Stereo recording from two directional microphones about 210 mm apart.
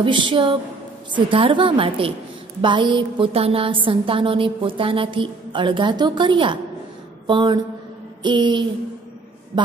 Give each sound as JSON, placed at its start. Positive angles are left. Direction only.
{"t": 0.0, "sound": "a woman's voice", "side_deg": -20}